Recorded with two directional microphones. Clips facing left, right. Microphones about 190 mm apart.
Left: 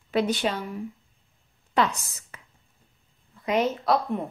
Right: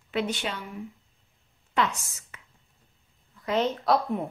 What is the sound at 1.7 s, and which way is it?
Speech, 35° left (ahead or behind).